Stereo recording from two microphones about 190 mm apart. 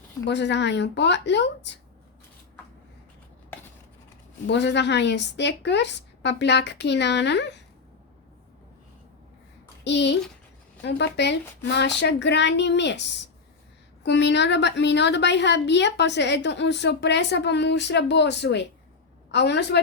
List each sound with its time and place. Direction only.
0.3 s a woman's voice: 65° left (ahead or behind)
4.4 s a woman's voice: 65° left (ahead or behind)
9.8 s a child's voice: 65° left (ahead or behind)